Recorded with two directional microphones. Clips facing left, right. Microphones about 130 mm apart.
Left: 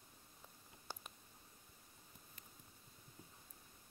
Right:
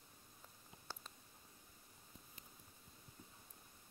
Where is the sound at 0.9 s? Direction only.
15° left (ahead or behind).